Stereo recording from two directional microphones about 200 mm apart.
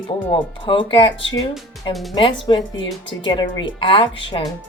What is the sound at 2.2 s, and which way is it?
Speech, 25° left (ahead or behind).